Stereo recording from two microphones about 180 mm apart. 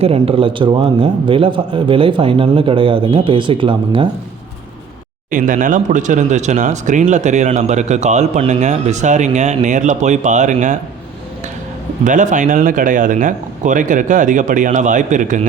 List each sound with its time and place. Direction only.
0.0 s a man's voice: 30° right (ahead or behind)
5.3 s speech: 45° right (ahead or behind)
12.0 s speech: 45° right (ahead or behind)